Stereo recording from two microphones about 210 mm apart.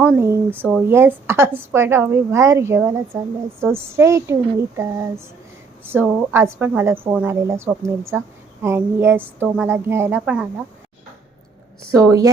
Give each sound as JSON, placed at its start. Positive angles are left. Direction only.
{"t": 0.0, "sound": "speech", "side_deg": -10}